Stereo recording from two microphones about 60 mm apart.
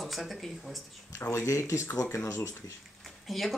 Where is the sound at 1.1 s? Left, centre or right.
Left.